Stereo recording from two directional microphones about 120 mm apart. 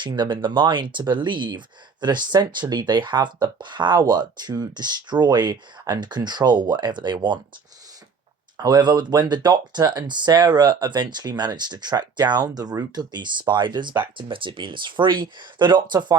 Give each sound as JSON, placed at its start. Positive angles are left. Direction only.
{"t": 0.0, "sound": "speech", "side_deg": -40}
{"t": 8.5, "sound": "speech", "side_deg": -35}